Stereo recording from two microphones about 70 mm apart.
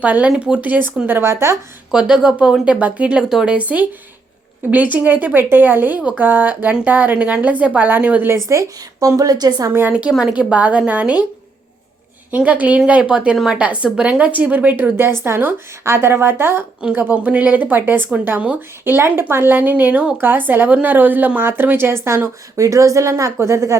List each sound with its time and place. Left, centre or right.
0.0 s a woman's voice: centre; by 1.5 s right
1.9 s speech: centre
8.4 s speech: right
10.0 s speech: centre
12.5 s a woman's voice: right
16.8 s a woman's voice: right